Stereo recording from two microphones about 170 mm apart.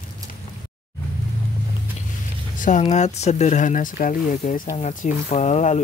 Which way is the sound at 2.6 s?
45° left (ahead or behind).